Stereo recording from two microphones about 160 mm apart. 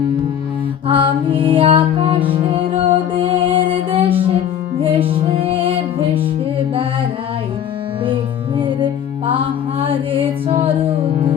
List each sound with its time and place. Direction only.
0.9 s music: 30° right (ahead or behind)
8.0 s music: 30° right (ahead or behind)